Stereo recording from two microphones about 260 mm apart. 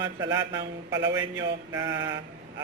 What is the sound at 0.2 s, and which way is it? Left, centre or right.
Mantra, centre.